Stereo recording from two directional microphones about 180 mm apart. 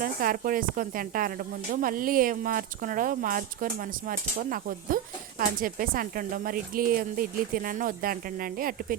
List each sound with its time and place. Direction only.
0.0 s speech: 50° right (ahead or behind)